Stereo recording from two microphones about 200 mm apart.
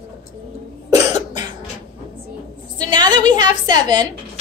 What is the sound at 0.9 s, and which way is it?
Cough, 20° right (ahead or behind).